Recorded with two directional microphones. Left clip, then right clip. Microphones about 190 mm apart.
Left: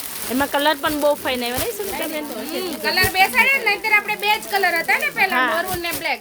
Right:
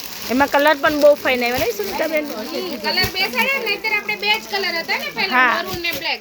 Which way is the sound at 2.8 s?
55° left (ahead or behind).